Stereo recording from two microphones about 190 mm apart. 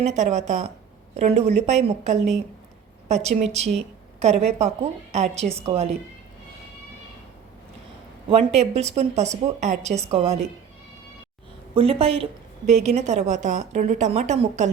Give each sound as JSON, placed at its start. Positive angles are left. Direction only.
{"t": 0.0, "sound": "a woman's voice", "side_deg": -40}
{"t": 8.3, "sound": "a woman's voice", "side_deg": -35}
{"t": 11.7, "sound": "a woman's voice", "side_deg": -30}